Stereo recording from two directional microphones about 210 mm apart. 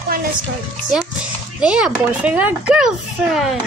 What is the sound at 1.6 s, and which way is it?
A child's voice, 5° right (ahead or behind).